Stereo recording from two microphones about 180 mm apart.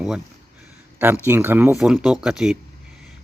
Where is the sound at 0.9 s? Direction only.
10° right (ahead or behind).